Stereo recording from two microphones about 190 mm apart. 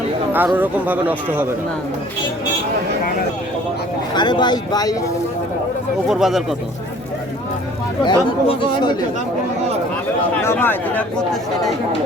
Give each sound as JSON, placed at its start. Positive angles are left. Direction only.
{"t": 0.3, "sound": "speech", "side_deg": -10}
{"t": 4.1, "sound": "speech", "side_deg": 25}
{"t": 6.1, "sound": "speech", "side_deg": 0}
{"t": 8.0, "sound": "speech", "side_deg": 25}
{"t": 10.4, "sound": "speech", "side_deg": 10}